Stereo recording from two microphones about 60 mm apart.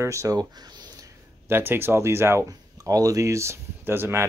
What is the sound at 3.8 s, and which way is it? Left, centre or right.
Speech, right.